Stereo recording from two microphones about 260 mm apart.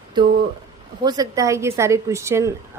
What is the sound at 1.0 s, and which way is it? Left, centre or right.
A woman's voice, centre.